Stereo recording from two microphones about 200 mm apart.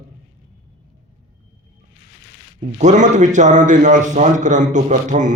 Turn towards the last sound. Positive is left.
turn(degrees=-40)  # may be behind; listen again after turning